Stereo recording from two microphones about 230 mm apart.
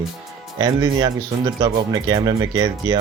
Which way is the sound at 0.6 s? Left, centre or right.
Centre.